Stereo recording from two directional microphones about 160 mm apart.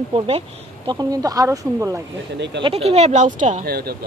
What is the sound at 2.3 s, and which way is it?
Speech, 90° right.